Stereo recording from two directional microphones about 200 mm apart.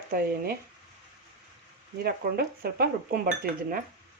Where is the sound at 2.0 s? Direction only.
50° right (ahead or behind).